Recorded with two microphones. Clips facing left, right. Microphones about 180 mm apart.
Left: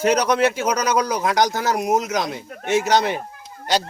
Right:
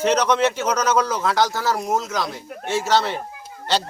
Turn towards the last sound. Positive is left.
turn(degrees=15)  # may be behind; listen again after turning